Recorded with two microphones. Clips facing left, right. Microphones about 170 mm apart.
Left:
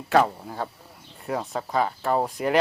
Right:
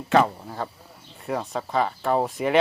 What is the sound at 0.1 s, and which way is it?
Speech, centre (ahead or behind).